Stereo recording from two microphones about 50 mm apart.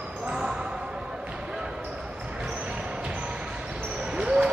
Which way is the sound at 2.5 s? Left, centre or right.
Right.